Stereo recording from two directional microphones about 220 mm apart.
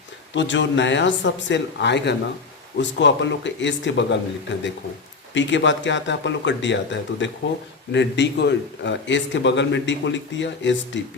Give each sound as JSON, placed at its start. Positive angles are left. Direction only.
{"t": 0.3, "sound": "a man's voice", "side_deg": 55}